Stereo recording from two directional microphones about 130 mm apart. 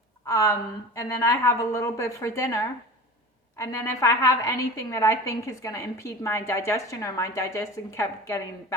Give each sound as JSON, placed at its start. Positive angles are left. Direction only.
{"t": 0.3, "sound": "a woman's voice", "side_deg": 25}